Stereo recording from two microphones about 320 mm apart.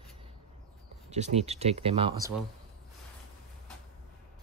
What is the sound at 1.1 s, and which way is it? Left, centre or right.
Speech, centre.